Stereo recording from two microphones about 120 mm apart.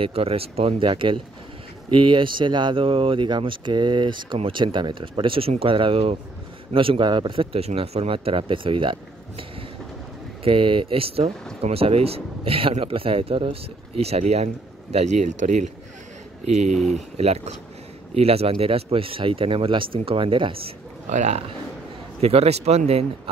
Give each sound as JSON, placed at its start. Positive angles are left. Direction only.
{"t": 0.0, "sound": "speech", "side_deg": -55}
{"t": 10.4, "sound": "speech", "side_deg": -45}
{"t": 16.9, "sound": "speech", "side_deg": -65}
{"t": 21.1, "sound": "speech", "side_deg": -75}
{"t": 22.2, "sound": "speech", "side_deg": -60}